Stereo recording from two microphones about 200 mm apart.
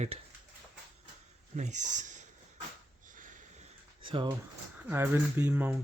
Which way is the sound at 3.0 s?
40° right (ahead or behind).